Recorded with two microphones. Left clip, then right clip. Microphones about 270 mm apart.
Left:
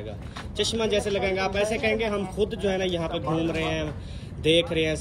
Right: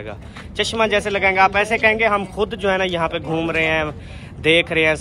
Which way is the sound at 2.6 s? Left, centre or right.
Left.